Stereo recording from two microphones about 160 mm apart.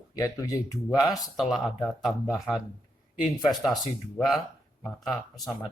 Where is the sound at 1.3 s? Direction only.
Centre (ahead or behind).